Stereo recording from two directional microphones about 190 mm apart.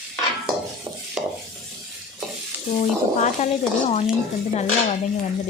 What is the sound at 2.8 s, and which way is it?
Frying, 40° left (ahead or behind).